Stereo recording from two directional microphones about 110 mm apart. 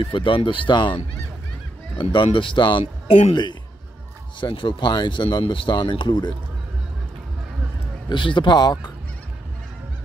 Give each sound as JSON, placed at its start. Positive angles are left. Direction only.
{"t": 0.0, "sound": "speech", "side_deg": 50}
{"t": 2.2, "sound": "speech", "side_deg": 50}
{"t": 2.8, "sound": "a man's voice", "side_deg": 70}
{"t": 4.4, "sound": "speech", "side_deg": 50}
{"t": 8.1, "sound": "speech", "side_deg": 45}